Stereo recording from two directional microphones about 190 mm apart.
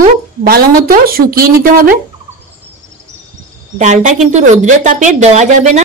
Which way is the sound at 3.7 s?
40° right (ahead or behind).